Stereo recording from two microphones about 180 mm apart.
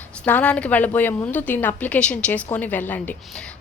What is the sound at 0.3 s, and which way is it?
A woman's voice, 10° left (ahead or behind).